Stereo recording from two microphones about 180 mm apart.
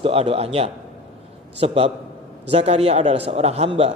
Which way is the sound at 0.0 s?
30° right (ahead or behind).